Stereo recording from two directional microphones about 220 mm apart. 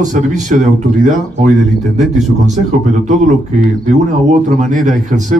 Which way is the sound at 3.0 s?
35° right (ahead or behind).